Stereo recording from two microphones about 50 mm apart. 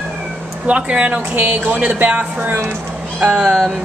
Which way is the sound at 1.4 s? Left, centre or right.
Right.